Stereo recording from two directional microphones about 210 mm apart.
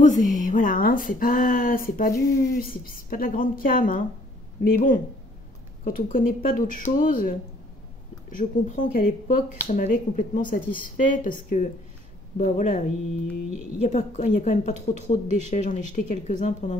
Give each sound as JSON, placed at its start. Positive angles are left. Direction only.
{"t": 0.0, "sound": "a woman's voice", "side_deg": 35}
{"t": 5.9, "sound": "a woman's voice", "side_deg": 40}
{"t": 8.4, "sound": "a woman's voice", "side_deg": 35}
{"t": 15.2, "sound": "speech", "side_deg": -30}
{"t": 15.5, "sound": "a woman's voice", "side_deg": 35}